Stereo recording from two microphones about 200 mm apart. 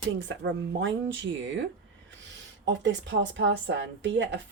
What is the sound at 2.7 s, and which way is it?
Speech, 65° right (ahead or behind).